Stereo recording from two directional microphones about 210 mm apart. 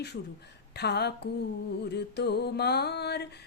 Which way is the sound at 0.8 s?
50° left (ahead or behind).